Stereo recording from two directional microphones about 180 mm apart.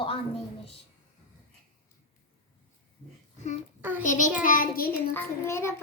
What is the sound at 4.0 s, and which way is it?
A child's voice, 45° left (ahead or behind).